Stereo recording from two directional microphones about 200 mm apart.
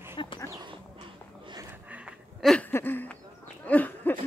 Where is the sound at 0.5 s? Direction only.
20° right (ahead or behind); by 3.2 s 10° left (ahead or behind).